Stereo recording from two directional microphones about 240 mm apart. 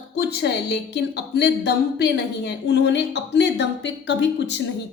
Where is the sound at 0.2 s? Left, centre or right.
Left.